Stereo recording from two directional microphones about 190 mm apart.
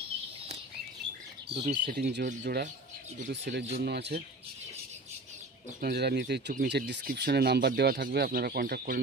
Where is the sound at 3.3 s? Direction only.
60° right (ahead or behind).